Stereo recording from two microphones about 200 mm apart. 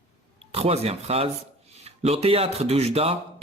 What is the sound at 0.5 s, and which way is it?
Speech, 30° right (ahead or behind).